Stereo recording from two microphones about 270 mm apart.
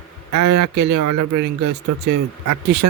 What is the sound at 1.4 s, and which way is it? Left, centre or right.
Speech, right.